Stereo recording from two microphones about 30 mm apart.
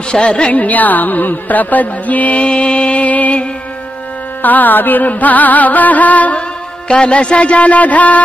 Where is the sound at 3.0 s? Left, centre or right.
Left.